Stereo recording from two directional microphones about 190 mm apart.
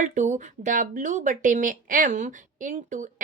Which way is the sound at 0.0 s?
40° right (ahead or behind).